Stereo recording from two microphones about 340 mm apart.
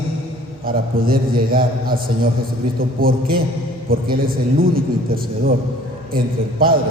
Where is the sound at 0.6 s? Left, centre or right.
Right.